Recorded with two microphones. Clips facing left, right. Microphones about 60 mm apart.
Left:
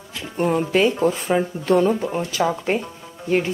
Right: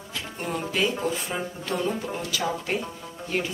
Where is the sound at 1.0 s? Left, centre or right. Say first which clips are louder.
Left 9 dB; left.